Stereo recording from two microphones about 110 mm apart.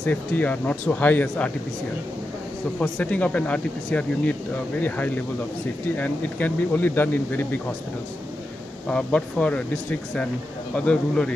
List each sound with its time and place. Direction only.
0.0 s speech: 15° left (ahead or behind)
2.8 s speech: 15° left (ahead or behind)
8.9 s speech: 10° left (ahead or behind)
10.8 s speech: 10° left (ahead or behind)